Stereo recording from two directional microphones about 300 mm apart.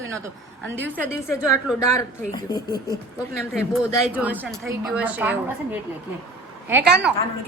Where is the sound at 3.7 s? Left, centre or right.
Centre.